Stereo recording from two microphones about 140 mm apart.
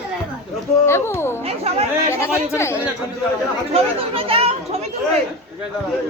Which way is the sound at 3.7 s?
45° right (ahead or behind).